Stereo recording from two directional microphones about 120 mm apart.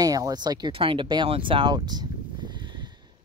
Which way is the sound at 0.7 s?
45° right (ahead or behind).